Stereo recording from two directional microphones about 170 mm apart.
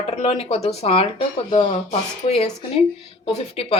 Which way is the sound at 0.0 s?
35° left (ahead or behind).